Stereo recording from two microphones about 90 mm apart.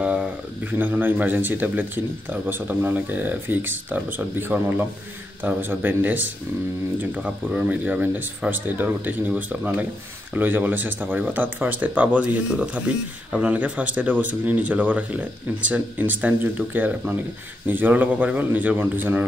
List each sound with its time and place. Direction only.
0.0 s speech: 15° right (ahead or behind)